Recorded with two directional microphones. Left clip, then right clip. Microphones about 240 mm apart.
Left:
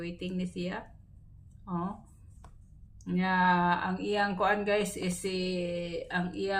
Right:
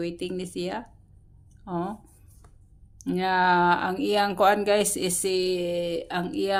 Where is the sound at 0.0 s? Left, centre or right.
Right.